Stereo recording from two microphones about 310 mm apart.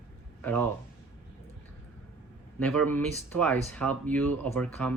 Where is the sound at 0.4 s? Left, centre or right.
Centre.